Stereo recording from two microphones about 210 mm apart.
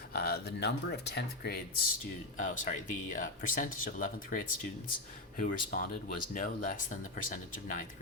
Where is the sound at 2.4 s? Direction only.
40° left (ahead or behind).